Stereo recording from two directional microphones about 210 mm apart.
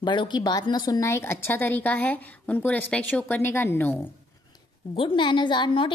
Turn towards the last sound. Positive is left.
turn(degrees=25)  # may be behind; listen again after turning